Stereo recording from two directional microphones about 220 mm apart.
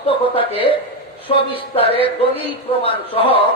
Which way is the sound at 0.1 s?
25° left (ahead or behind).